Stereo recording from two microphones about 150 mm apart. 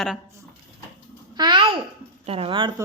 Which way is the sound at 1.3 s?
30° right (ahead or behind).